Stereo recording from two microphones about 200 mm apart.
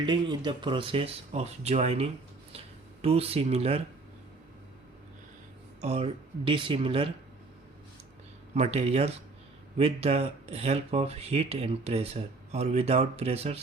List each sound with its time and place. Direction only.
0.0 s speech: 25° right (ahead or behind)
5.8 s speech: 30° right (ahead or behind)
8.5 s speech: 30° right (ahead or behind)